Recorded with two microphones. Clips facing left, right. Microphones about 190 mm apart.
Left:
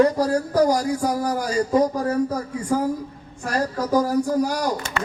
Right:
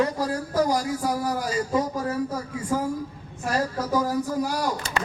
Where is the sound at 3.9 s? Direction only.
45° left (ahead or behind).